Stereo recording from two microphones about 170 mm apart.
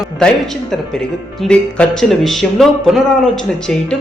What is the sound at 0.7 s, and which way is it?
Speech, 5° left (ahead or behind).